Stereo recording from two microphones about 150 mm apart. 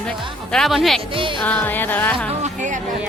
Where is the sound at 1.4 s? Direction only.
10° left (ahead or behind).